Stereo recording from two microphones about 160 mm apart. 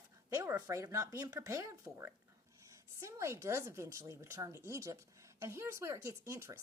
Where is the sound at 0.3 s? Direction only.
20° right (ahead or behind).